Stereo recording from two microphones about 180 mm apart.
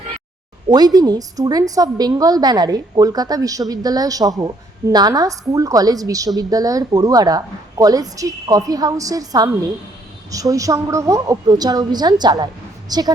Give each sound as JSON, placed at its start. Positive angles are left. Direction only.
{"t": 0.7, "sound": "a woman's voice", "side_deg": -20}